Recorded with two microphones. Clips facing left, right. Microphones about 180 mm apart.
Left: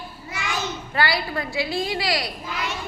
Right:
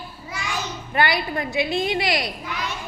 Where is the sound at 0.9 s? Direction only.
20° right (ahead or behind).